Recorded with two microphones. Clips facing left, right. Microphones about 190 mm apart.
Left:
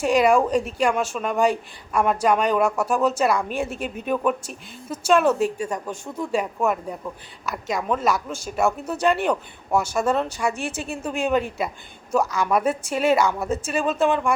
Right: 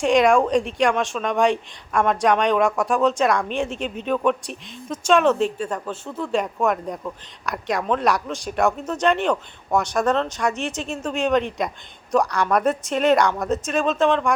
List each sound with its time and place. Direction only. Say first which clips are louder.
0.0 s speech: right 1 dB; 5° left (ahead or behind)